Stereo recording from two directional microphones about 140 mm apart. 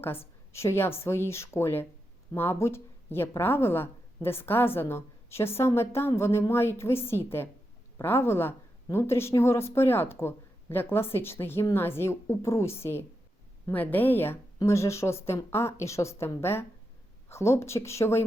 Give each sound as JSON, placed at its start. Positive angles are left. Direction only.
{"t": 0.0, "sound": "a woman's voice", "side_deg": 15}